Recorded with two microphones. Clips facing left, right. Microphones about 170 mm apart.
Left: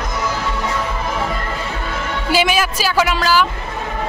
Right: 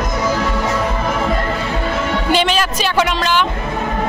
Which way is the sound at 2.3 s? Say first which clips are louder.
Left 1 dB; 10° left (ahead or behind).